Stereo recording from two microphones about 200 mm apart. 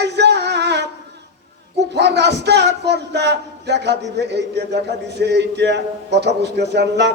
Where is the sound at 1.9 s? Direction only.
55° right (ahead or behind).